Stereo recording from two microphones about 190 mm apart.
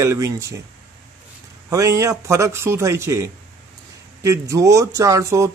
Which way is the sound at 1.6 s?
15° right (ahead or behind).